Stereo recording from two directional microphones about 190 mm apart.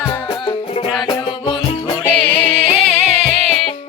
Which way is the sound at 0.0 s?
15° left (ahead or behind).